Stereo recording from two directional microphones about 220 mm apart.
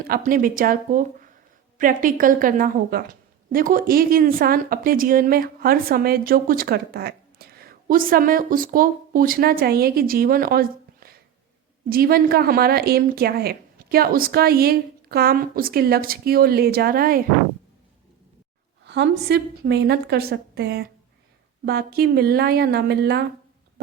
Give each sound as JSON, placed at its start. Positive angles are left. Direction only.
{"t": 0.1, "sound": "a woman's voice", "side_deg": -40}
{"t": 18.9, "sound": "a woman's voice", "side_deg": -50}